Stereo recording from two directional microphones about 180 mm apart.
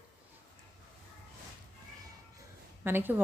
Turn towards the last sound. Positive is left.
turn(degrees=-10)  # may be behind; listen again after turning